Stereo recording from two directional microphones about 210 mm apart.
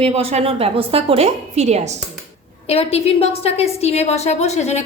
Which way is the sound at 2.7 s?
30° left (ahead or behind).